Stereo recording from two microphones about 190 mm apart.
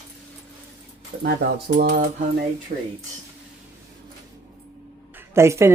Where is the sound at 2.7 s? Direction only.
45° right (ahead or behind).